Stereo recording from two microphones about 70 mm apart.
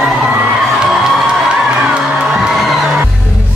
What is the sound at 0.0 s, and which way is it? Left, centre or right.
Crowd, centre.